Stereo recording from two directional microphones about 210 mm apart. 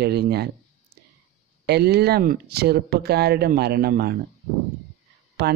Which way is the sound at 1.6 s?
50° right (ahead or behind).